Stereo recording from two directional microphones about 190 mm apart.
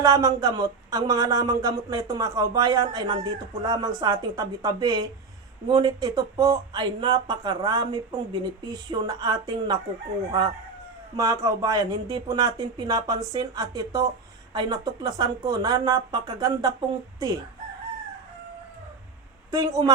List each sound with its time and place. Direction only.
0.0 s speech: 20° right (ahead or behind)
11.2 s speech: 20° right (ahead or behind)
19.5 s a woman's voice: 15° right (ahead or behind)